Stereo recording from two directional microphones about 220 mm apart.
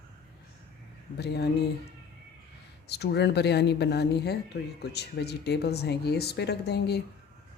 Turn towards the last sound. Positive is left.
turn(degrees=50)  # may be behind; listen again after turning